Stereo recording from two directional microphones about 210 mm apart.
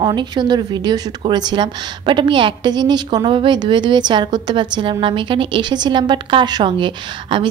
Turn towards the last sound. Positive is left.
turn(degrees=-25)  # may be behind; listen again after turning